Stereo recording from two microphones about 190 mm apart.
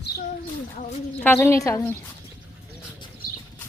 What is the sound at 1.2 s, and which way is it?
Speech, 10° left (ahead or behind).